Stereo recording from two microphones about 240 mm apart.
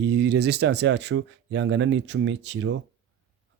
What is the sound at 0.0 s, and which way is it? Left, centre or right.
Speech, right.